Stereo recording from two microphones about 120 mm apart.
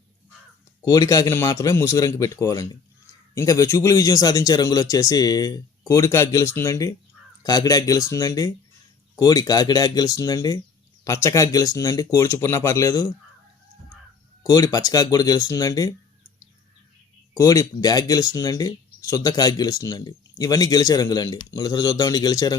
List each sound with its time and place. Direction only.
0.9 s a man's voice: 30° left (ahead or behind)
14.4 s a man's voice: 30° left (ahead or behind)
17.3 s speech: 30° left (ahead or behind)